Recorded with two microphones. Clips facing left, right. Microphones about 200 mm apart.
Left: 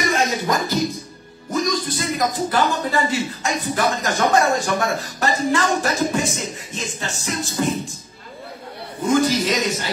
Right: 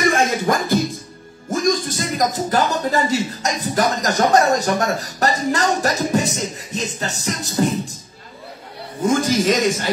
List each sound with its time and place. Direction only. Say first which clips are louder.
0.1 s music: right 2 dB; 50° right (ahead or behind)
1.5 s speech: right 3 dB; 45° right (ahead or behind)
9.0 s a man's voice: right 1 dB; 45° right (ahead or behind)